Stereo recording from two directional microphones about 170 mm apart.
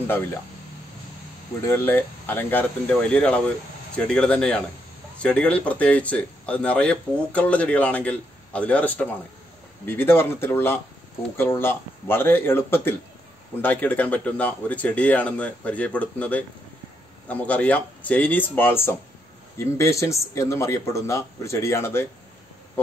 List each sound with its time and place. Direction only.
1.7 s speech: 10° left (ahead or behind)